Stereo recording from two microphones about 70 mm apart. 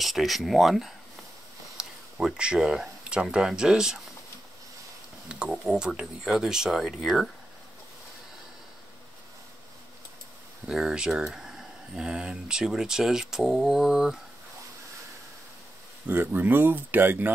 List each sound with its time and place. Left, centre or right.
0.0 s speech: centre
5.3 s speech: centre
10.7 s speech: centre
16.1 s speech: right